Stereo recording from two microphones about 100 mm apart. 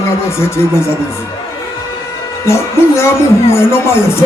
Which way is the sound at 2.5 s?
30° left (ahead or behind).